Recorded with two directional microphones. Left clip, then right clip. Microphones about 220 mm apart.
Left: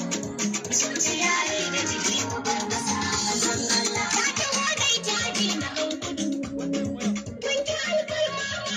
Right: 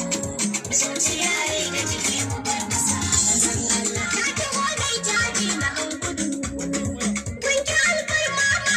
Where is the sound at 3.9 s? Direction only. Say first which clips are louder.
Right 1 dB; 40° right (ahead or behind).